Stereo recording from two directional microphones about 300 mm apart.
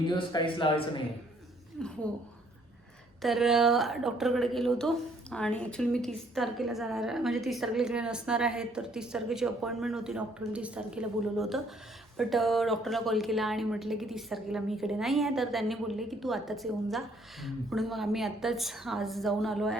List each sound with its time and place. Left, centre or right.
0.1 s speech: centre
1.8 s a woman's voice: centre
3.2 s a woman's voice: centre